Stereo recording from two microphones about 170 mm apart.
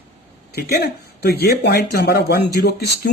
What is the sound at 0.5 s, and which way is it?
Speech, 70° left (ahead or behind).